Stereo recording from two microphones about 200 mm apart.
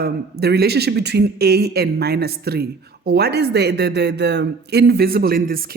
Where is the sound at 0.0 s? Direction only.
55° right (ahead or behind).